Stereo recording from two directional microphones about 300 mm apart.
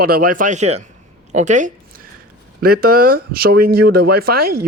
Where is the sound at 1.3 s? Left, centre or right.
Right.